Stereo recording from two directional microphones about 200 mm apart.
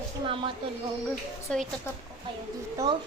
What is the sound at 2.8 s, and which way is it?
Speech, 15° right (ahead or behind).